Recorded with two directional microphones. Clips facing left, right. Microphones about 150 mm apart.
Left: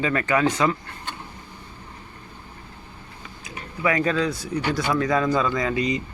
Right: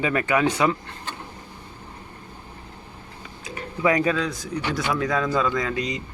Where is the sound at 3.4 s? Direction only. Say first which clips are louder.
Right 2 dB; 20° right (ahead or behind).